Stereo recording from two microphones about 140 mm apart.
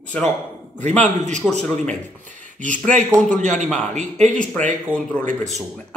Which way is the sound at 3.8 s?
55° right (ahead or behind).